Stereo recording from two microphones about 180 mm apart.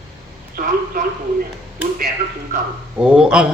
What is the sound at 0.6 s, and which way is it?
Speech, 50° right (ahead or behind).